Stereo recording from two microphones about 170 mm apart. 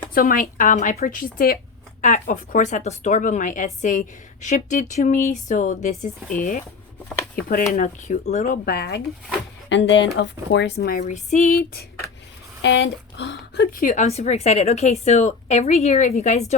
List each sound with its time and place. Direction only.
0.1 s a woman's voice: 55° left (ahead or behind)
2.0 s speech: 45° left (ahead or behind)
8.6 s speech: 70° left (ahead or behind)
9.6 s speech: 90° left; by 11.0 s 65° left (ahead or behind)
11.0 s speech: 45° left (ahead or behind)
12.6 s speech: 90° left; by 16.6 s 40° left (ahead or behind)